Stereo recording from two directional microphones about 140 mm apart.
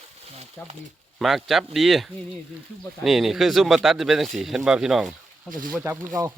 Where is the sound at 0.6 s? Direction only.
10° left (ahead or behind).